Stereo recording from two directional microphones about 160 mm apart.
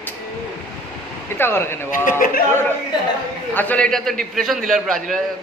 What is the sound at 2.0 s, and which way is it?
Speech, 55° left (ahead or behind).